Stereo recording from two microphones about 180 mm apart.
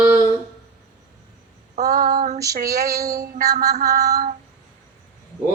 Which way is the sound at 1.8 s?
40° right (ahead or behind).